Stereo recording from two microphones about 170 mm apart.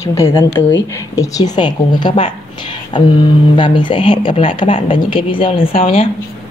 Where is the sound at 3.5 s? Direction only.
30° left (ahead or behind).